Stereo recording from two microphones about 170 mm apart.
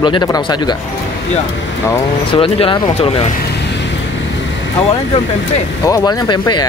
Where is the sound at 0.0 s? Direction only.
25° left (ahead or behind).